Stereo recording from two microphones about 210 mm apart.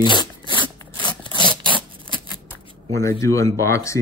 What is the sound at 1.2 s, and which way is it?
Sawing, 20° left (ahead or behind).